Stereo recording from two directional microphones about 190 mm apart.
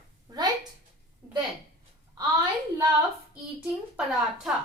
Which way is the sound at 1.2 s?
15° right (ahead or behind).